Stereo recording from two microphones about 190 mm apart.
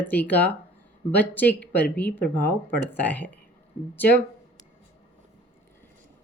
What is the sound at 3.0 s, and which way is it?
Speech, 10° left (ahead or behind).